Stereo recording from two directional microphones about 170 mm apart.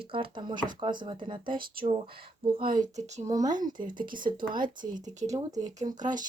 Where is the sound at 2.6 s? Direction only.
50° right (ahead or behind).